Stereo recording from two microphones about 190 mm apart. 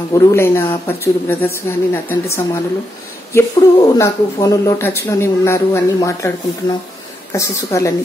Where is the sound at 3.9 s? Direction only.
15° left (ahead or behind).